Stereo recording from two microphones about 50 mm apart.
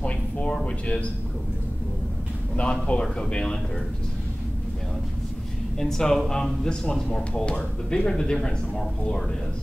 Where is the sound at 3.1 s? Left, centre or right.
Centre.